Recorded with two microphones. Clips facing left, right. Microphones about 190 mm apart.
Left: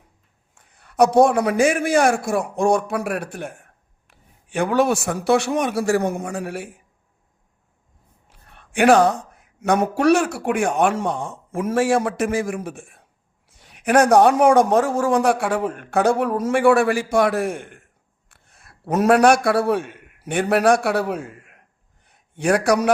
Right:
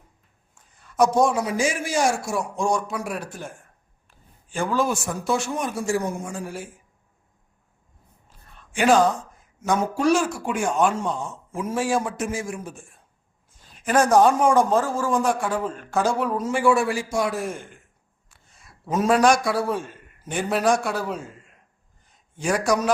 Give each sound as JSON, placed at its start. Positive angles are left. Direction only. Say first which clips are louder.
{"t": 0.5, "sound": "a man's voice", "louder": "left 4 dB", "side_deg": 65}
{"t": 8.3, "sound": "a man's voice", "louder": "left 3 dB", "side_deg": 65}
{"t": 22.0, "sound": "a sound", "louder": "left 5 dB", "side_deg": 65}